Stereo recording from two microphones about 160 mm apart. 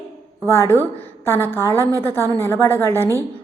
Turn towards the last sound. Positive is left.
turn(degrees=15)  # may be behind; listen again after turning